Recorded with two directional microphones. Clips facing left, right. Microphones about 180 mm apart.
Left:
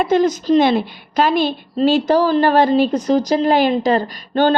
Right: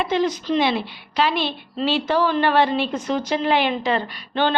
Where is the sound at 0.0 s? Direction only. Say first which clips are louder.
Left 6 dB; 45° left (ahead or behind).